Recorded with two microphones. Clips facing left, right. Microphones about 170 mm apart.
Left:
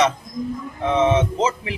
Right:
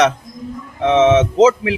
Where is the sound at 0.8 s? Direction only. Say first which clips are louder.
Right 6 dB; 90° right.